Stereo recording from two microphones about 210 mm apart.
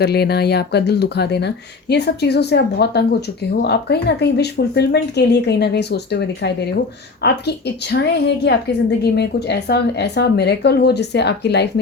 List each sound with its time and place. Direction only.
0.0 s speech: 50° left (ahead or behind)